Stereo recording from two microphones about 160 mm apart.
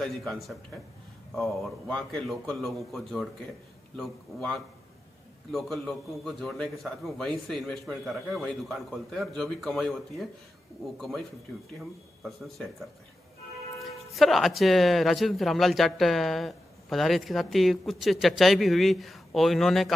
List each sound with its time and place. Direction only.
0.0 s speech: centre (ahead or behind)
13.7 s speech: centre (ahead or behind)